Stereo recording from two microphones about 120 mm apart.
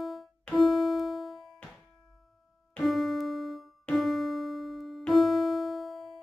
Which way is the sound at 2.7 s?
Centre (ahead or behind).